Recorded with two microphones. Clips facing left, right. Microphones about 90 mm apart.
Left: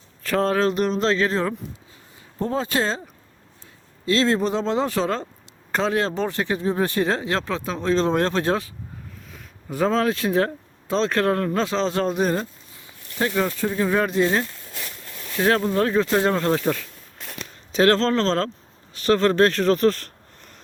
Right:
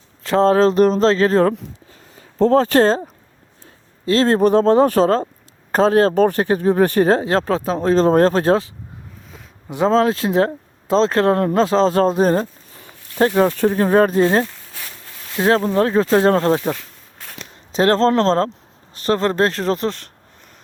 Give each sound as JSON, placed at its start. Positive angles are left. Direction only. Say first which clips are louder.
{"t": 0.2, "sound": "speech", "louder": "right 7 dB", "side_deg": -30}
{"t": 2.4, "sound": "speech", "louder": "right 10 dB", "side_deg": -65}
{"t": 4.0, "sound": "speech", "louder": "right 6 dB", "side_deg": -40}
{"t": 9.3, "sound": "a sound", "louder": "right 1 dB", "side_deg": -15}
{"t": 9.9, "sound": "speech", "louder": "right 6 dB", "side_deg": -30}
{"t": 15.4, "sound": "speech", "louder": "right 4 dB", "side_deg": -30}
{"t": 17.7, "sound": "speech", "louder": "right 2 dB", "side_deg": -30}
{"t": 18.0, "sound": "speech", "louder": "right 6 dB", "side_deg": -45}
{"t": 18.9, "sound": "speech", "louder": "even", "side_deg": -30}